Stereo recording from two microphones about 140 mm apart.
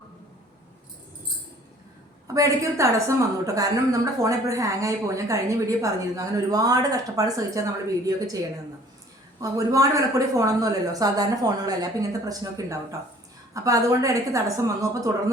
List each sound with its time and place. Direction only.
2.2 s a woman's voice: 25° right (ahead or behind)
9.4 s a woman's voice: 25° right (ahead or behind)